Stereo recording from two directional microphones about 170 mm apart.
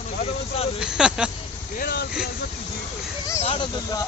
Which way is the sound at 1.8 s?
65° left (ahead or behind).